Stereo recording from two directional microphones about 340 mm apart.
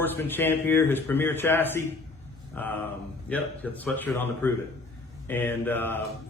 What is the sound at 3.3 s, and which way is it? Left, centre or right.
A man's voice, centre.